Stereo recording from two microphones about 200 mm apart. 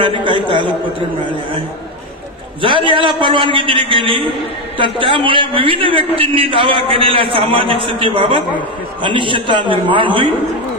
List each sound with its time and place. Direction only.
0.2 s a man's voice: 25° right (ahead or behind)
2.6 s a man's voice: 25° right (ahead or behind)